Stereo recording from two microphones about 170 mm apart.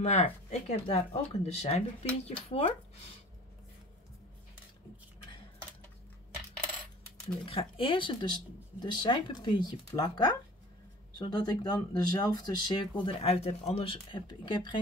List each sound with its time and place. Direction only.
0.0 s speech: 40° left (ahead or behind)
7.4 s speech: 35° left (ahead or behind)